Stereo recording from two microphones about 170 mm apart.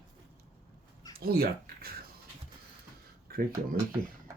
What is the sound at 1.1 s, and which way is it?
Speech, 60° right (ahead or behind).